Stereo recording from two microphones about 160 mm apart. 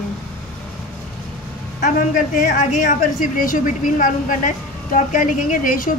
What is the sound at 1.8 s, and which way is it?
A woman's voice, 55° left (ahead or behind).